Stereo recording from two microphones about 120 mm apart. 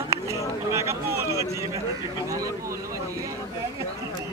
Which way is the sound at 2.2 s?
25° right (ahead or behind).